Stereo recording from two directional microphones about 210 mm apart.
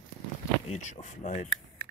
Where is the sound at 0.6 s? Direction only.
35° left (ahead or behind).